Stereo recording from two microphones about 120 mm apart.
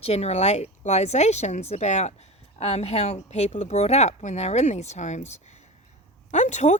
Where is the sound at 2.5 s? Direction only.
60° left (ahead or behind).